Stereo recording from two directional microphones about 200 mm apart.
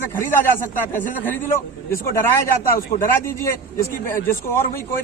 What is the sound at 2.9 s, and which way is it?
Speech, 40° left (ahead or behind).